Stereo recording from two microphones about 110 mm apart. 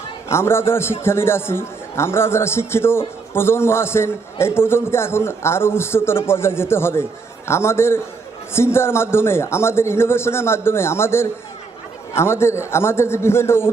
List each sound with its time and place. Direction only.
0.3 s a man's voice: 25° left (ahead or behind)